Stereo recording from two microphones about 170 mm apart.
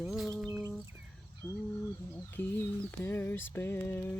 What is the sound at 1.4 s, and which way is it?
Mantra, 10° left (ahead or behind).